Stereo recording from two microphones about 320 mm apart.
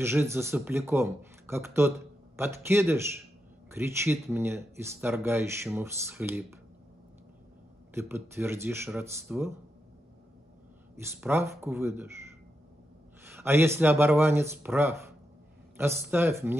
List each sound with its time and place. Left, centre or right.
0.0 s speech: centre
7.9 s speech: centre
11.0 s speech: centre
13.3 s speech: centre